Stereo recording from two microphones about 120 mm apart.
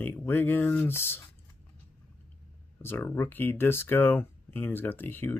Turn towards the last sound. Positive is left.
turn(degrees=15)  # may be behind; listen again after turning